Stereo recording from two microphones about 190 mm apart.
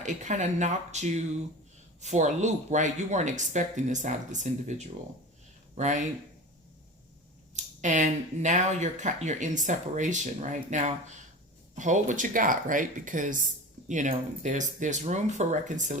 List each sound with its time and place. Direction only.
0.0 s speech: 40° right (ahead or behind)
7.5 s speech: 40° right (ahead or behind)